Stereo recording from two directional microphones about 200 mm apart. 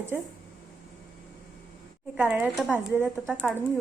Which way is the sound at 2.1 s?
5° right (ahead or behind).